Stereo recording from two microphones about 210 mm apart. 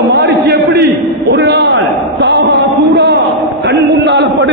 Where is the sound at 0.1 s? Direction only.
55° right (ahead or behind).